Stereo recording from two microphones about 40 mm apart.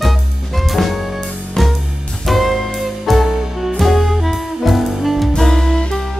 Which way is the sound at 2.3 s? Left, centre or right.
Centre.